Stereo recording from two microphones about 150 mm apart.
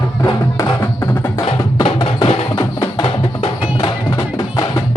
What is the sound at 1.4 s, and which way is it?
Music, 35° left (ahead or behind).